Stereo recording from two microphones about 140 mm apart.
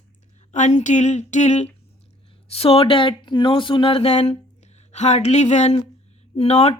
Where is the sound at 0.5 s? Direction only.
55° left (ahead or behind).